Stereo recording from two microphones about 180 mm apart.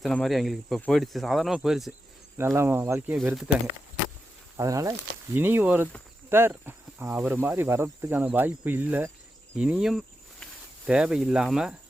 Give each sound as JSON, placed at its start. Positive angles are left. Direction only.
{"t": 0.0, "sound": "speech", "side_deg": 0}
{"t": 2.4, "sound": "speech", "side_deg": -15}
{"t": 3.2, "sound": "speech", "side_deg": 0}
{"t": 4.5, "sound": "speech", "side_deg": -20}